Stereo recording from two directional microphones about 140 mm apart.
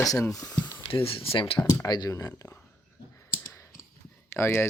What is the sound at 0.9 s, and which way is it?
Speech, 40° left (ahead or behind).